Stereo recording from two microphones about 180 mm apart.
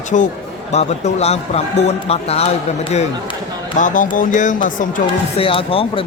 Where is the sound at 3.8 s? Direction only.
45° left (ahead or behind).